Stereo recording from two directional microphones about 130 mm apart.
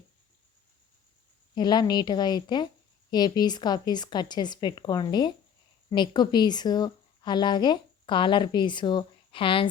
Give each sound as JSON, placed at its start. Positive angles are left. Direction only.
{"t": 1.5, "sound": "a woman's voice", "side_deg": 35}